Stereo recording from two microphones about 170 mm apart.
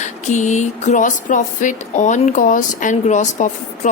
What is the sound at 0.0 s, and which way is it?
Speech, 45° left (ahead or behind).